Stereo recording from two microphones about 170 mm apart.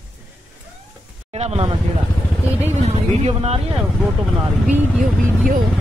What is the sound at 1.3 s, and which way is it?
Speech, 35° right (ahead or behind).